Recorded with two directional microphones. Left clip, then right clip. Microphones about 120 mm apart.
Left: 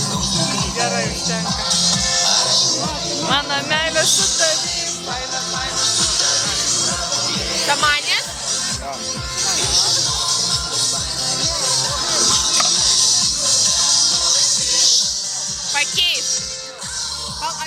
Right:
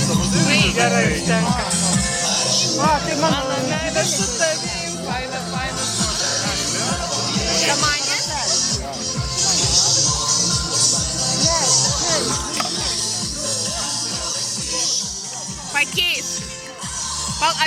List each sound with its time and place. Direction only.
0.3 s music: 10° left (ahead or behind); by 3.8 s 30° left (ahead or behind)
5.8 s music: 25° left (ahead or behind)
7.9 s music: 45° left (ahead or behind)
9.4 s music: 15° left (ahead or behind)
12.7 s music: 45° left (ahead or behind)